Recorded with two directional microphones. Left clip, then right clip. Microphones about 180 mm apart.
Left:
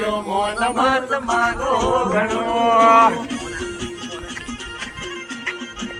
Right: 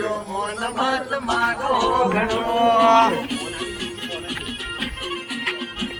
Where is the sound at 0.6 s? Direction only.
25° left (ahead or behind).